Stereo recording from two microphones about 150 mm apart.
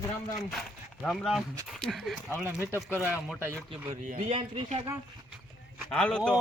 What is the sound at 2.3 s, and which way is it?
Speech, 15° right (ahead or behind).